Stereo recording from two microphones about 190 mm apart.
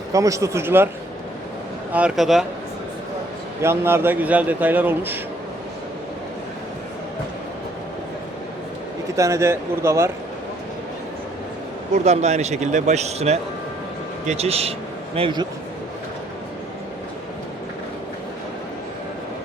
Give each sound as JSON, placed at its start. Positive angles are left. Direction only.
{"t": 0.1, "sound": "a man's voice", "side_deg": -15}
{"t": 1.9, "sound": "speech", "side_deg": -5}
{"t": 3.6, "sound": "a man's voice", "side_deg": -15}
{"t": 9.1, "sound": "a man's voice", "side_deg": -15}
{"t": 12.0, "sound": "a man's voice", "side_deg": -35}